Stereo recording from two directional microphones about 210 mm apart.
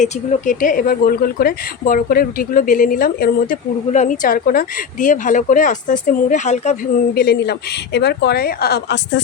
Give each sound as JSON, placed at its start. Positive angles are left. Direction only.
{"t": 0.0, "sound": "speech", "side_deg": 35}
{"t": 7.1, "sound": "a woman's voice", "side_deg": 50}